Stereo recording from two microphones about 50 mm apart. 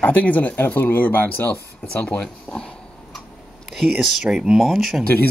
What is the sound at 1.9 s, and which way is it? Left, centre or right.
Speech, left.